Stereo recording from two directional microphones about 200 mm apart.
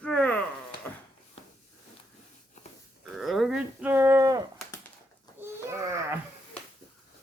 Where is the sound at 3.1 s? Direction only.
Centre (ahead or behind).